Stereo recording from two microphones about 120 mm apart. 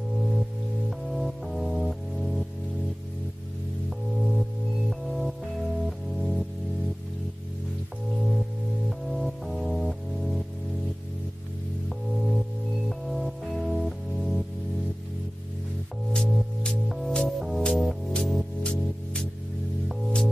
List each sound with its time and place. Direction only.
0.8 s music: centre (ahead or behind)
4.2 s music: centre (ahead or behind)
8.8 s music: centre (ahead or behind)
12.2 s music: centre (ahead or behind)
16.1 s music: 5° left (ahead or behind)